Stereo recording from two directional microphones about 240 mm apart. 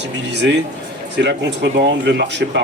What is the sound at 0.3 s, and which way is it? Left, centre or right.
Speech, right.